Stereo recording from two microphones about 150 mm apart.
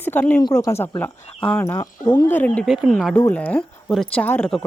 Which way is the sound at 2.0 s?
25° left (ahead or behind).